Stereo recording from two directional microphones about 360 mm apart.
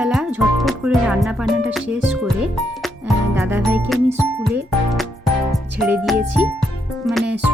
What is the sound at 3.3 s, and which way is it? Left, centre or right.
Speech, centre.